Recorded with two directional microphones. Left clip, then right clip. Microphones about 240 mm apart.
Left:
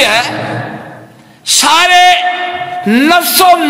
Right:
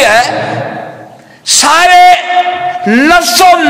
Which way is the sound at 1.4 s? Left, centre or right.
Left.